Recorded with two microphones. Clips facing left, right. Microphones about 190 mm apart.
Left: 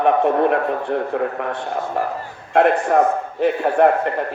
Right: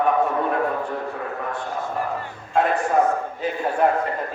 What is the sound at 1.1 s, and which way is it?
Speech, 70° left (ahead or behind).